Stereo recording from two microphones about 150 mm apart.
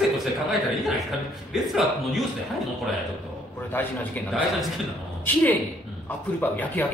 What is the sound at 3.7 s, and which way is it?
Speech, 15° left (ahead or behind).